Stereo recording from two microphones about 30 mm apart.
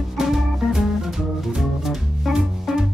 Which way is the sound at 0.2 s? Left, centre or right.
Centre.